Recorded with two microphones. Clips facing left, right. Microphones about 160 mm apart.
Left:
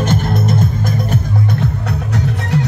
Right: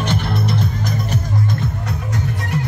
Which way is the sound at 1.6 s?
70° left (ahead or behind).